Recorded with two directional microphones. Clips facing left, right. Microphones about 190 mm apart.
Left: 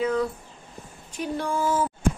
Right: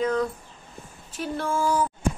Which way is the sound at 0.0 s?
10° left (ahead or behind).